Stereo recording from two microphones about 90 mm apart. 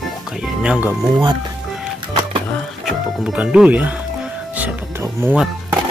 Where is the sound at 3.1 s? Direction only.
Centre (ahead or behind).